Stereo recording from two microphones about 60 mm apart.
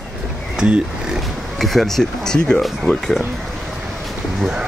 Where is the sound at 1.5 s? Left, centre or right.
Centre.